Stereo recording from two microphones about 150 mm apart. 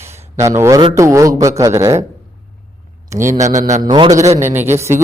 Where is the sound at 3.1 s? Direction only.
15° right (ahead or behind).